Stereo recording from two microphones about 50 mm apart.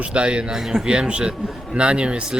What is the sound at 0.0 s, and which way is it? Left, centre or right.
Speech, right.